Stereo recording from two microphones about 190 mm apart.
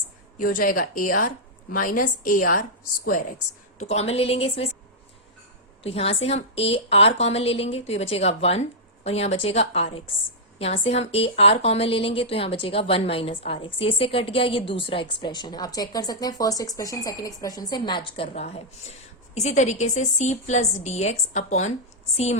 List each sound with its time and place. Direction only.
0.3 s a woman's voice: 45° left (ahead or behind)
3.8 s a woman's voice: 35° left (ahead or behind)
5.8 s a woman's voice: 30° left (ahead or behind)